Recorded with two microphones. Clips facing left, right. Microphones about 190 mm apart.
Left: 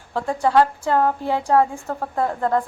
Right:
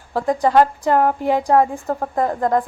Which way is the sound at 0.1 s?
15° right (ahead or behind).